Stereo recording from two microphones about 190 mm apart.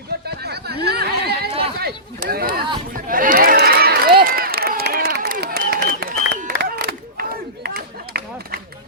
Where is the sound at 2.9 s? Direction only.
45° right (ahead or behind).